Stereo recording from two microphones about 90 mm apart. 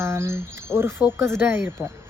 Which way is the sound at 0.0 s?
30° right (ahead or behind).